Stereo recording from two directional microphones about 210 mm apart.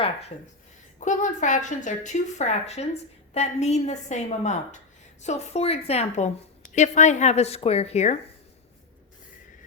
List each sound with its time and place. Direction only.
0.9 s a woman's voice: 35° left (ahead or behind)